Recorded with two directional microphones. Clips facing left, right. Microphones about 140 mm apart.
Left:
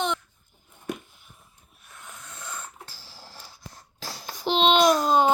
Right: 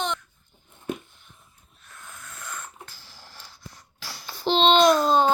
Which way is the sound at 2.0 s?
20° left (ahead or behind).